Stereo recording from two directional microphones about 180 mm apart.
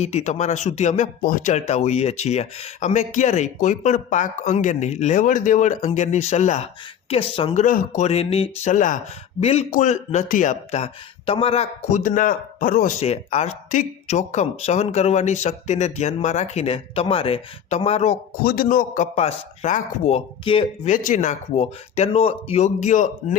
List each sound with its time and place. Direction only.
0.0 s speech: 40° left (ahead or behind)
7.6 s speech: 45° left (ahead or behind)
9.4 s speech: 35° left (ahead or behind)
13.0 s speech: 35° left (ahead or behind)
18.4 s speech: 55° left (ahead or behind)
19.1 s speech: 40° left (ahead or behind)
20.8 s speech: 45° left (ahead or behind)